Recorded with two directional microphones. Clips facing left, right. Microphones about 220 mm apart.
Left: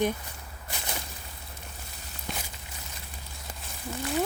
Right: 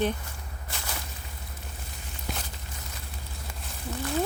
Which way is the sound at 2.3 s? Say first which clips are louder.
Right 1 dB; centre (ahead or behind).